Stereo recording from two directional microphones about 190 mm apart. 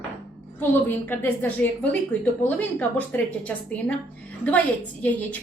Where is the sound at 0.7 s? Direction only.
10° left (ahead or behind).